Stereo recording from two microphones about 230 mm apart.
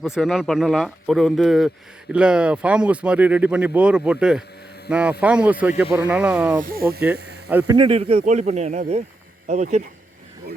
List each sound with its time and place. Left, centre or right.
0.0 s speech: centre
6.6 s speech: right
7.7 s a man's voice: right